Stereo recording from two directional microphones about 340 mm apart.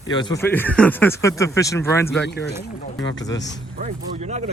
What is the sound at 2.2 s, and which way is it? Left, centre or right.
Speech, left.